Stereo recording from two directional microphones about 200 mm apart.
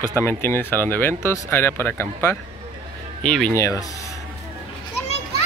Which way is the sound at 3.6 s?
15° left (ahead or behind).